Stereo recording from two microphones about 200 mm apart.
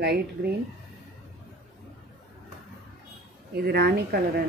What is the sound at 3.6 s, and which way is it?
Speech, 50° right (ahead or behind).